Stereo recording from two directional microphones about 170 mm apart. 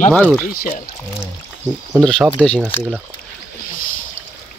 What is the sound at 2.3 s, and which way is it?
Speech, 5° left (ahead or behind).